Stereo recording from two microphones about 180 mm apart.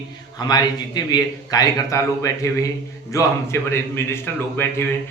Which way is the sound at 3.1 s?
15° left (ahead or behind).